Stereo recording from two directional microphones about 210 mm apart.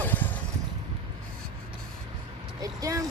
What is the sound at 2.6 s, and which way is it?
Vehicle, 15° right (ahead or behind).